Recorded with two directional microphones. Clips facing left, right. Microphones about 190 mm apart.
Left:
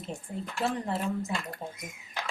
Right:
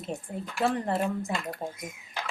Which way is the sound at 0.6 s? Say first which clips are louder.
Right 4 dB; 55° right (ahead or behind).